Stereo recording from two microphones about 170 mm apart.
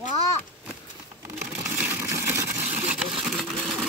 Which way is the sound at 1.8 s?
15° right (ahead or behind).